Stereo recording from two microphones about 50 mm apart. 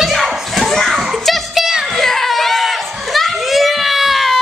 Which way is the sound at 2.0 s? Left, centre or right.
Centre.